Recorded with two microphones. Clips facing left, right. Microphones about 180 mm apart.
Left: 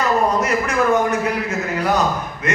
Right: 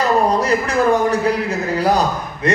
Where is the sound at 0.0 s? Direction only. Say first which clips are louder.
Right 2 dB; 35° right (ahead or behind).